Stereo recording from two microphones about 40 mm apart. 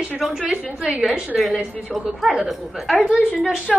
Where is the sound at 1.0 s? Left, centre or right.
Centre.